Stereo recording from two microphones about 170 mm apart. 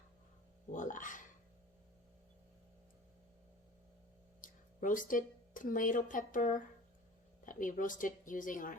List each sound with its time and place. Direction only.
0.7 s speech: 50° left (ahead or behind)
4.4 s speech: 50° left (ahead or behind)